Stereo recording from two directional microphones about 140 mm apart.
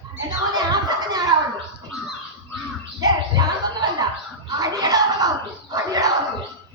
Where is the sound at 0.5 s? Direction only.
30° right (ahead or behind).